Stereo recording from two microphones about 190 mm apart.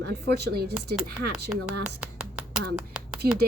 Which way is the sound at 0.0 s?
60° right (ahead or behind).